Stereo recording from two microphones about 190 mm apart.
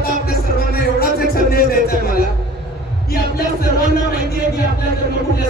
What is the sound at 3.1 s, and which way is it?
Music, 55° left (ahead or behind).